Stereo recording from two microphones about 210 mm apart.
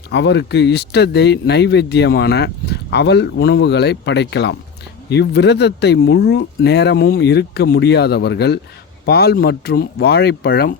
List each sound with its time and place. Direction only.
0.1 s speech: 55° left (ahead or behind)